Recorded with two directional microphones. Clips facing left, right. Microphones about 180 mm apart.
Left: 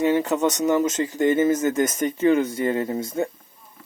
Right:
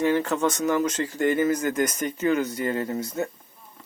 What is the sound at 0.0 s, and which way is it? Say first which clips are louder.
Speech: left 2 dB; 20° left (ahead or behind).